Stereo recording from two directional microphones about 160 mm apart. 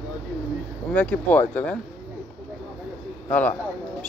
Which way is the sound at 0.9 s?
10° left (ahead or behind).